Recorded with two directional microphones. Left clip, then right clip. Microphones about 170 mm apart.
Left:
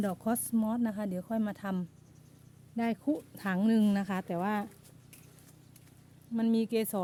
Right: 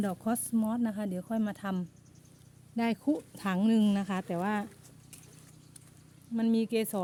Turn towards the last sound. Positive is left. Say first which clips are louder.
# right 1 dB
turn(degrees=0)  # may be behind; listen again after turning